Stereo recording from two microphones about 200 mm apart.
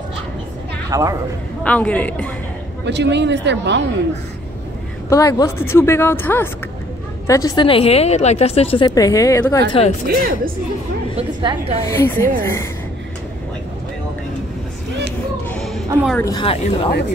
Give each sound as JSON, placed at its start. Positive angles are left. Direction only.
{"t": 0.8, "sound": "speech", "side_deg": -15}
{"t": 1.6, "sound": "speech", "side_deg": 5}
{"t": 2.8, "sound": "speech", "side_deg": -60}
{"t": 5.1, "sound": "a woman's voice", "side_deg": 15}
{"t": 8.8, "sound": "speech", "side_deg": 15}
{"t": 10.0, "sound": "a woman's voice", "side_deg": -45}
{"t": 11.1, "sound": "a woman's voice", "side_deg": -30}
{"t": 11.9, "sound": "speech", "side_deg": 15}
{"t": 15.5, "sound": "a sound", "side_deg": 0}
{"t": 16.1, "sound": "speech", "side_deg": 10}
{"t": 16.3, "sound": "a woman's voice", "side_deg": 25}